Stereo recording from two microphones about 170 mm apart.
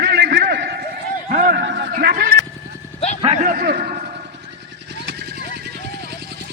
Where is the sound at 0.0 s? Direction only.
70° right (ahead or behind).